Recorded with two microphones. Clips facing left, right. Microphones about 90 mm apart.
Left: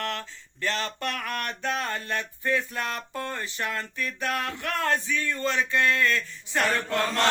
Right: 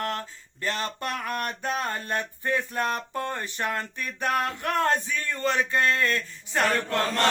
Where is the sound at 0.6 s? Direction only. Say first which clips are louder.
Even; 20° right (ahead or behind).